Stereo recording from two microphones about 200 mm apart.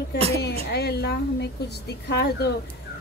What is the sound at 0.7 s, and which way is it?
Speech, 55° left (ahead or behind).